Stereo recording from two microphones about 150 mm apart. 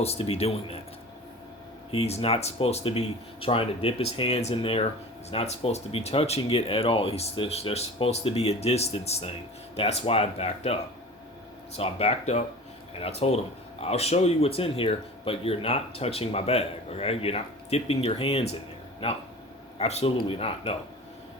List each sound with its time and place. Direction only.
0.0 s speech: 40° left (ahead or behind)
1.9 s speech: 40° left (ahead or behind)
11.8 s speech: 45° left (ahead or behind)